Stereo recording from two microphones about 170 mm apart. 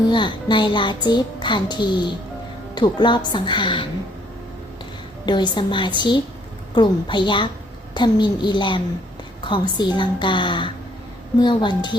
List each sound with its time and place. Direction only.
0.1 s a child's voice: 30° left (ahead or behind)
5.2 s a child's voice: 25° left (ahead or behind)